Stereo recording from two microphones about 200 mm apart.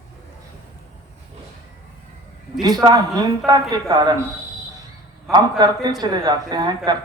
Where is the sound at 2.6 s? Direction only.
20° right (ahead or behind).